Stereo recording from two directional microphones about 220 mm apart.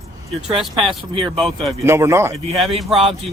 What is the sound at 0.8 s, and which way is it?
Speech, 25° right (ahead or behind).